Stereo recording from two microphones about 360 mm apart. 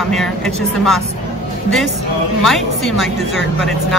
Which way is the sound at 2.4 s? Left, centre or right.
Centre.